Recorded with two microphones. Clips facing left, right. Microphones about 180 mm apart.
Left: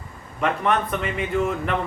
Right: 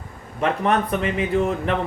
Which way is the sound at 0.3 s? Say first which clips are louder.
Right 2 dB; 35° right (ahead or behind).